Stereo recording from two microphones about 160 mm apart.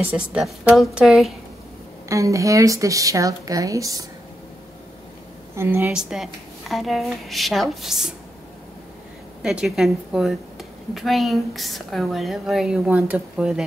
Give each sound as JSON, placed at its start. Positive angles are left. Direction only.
{"t": 0.0, "sound": "a woman's voice", "side_deg": -10}
{"t": 2.0, "sound": "a woman's voice", "side_deg": -20}
{"t": 5.6, "sound": "a woman's voice", "side_deg": -15}
{"t": 5.9, "sound": "a woman's voice", "side_deg": -5}
{"t": 9.4, "sound": "a woman's voice", "side_deg": -5}